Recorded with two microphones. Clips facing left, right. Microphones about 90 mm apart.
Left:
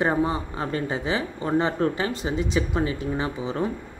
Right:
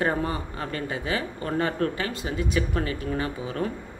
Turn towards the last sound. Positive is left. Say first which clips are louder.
# left 2 dB
turn(degrees=20)  # may be behind; listen again after turning